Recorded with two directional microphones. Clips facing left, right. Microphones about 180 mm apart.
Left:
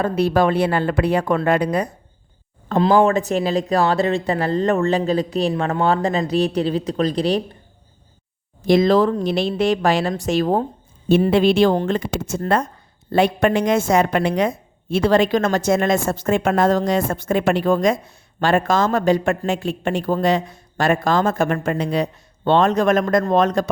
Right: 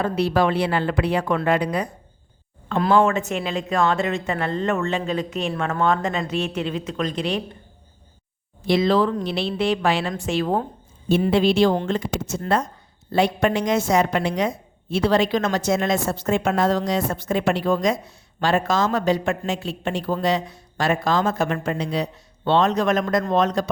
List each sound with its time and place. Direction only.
0.0 s a woman's voice: 45° left (ahead or behind)
2.9 s speech: 35° left (ahead or behind)
8.6 s a woman's voice: 45° left (ahead or behind)
11.3 s a woman's voice: 55° left (ahead or behind)